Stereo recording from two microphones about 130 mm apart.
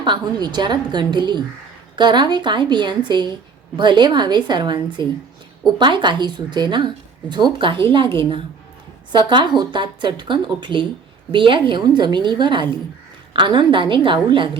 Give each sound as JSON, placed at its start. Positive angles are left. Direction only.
{"t": 0.0, "sound": "a woman's voice", "side_deg": -35}